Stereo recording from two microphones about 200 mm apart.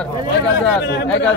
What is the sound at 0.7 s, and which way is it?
Speech, 55° left (ahead or behind).